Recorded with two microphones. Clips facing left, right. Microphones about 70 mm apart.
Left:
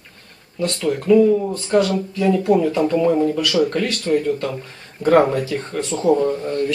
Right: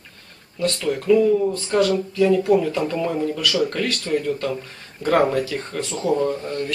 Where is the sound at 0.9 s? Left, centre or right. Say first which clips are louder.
Left 3 dB; centre.